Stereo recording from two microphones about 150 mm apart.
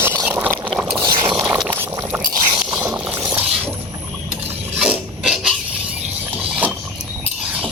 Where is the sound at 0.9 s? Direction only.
30° right (ahead or behind).